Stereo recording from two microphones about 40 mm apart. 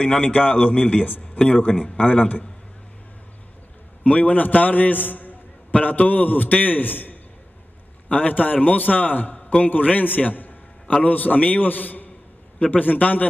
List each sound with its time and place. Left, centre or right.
0.2 s a man's voice: left
1.0 s a man's voice: left
2.0 s a man's voice: left
4.0 s a man's voice: left
5.7 s a man's voice: left
8.1 s a man's voice: left
9.3 s a sound: left
9.7 s a man's voice: left